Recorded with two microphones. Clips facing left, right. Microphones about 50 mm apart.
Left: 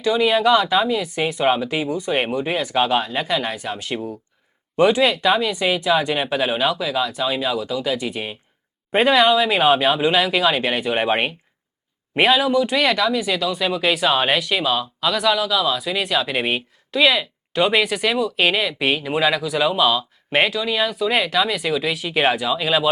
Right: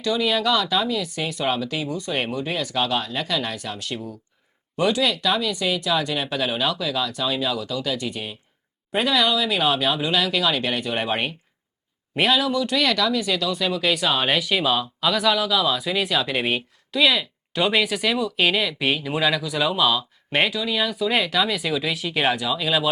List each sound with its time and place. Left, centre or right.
0.0 s speech: left
8.9 s speech: left; by 22.9 s centre